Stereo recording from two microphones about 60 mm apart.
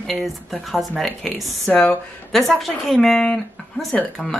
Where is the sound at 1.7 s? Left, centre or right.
Left.